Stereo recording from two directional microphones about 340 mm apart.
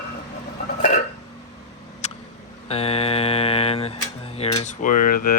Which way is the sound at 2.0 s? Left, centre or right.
Centre.